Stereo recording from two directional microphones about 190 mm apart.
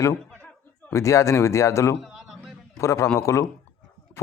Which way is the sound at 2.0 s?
Centre (ahead or behind).